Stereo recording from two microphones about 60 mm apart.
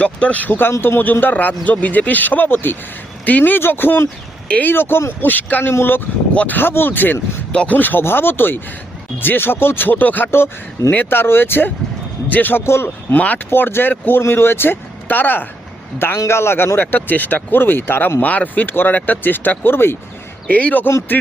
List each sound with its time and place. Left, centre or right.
0.0 s a man's voice: left
0.7 s a man's voice: left
4.4 s speech: left
4.7 s speech: left
6.3 s speech: left
6.6 s speech: left
7.5 s speech: centre
7.8 s speech: left
12.6 s speech: left
13.1 s a man's voice: left
13.5 s speech: left
16.1 s speech: left
20.5 s a man's voice: left